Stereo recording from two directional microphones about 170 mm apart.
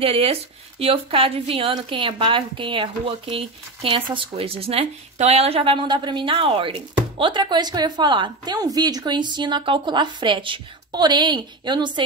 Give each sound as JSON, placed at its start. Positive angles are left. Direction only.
{"t": 0.0, "sound": "speech", "side_deg": -35}